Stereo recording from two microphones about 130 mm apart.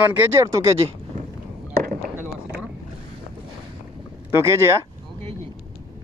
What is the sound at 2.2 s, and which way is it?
Boat, 15° right (ahead or behind).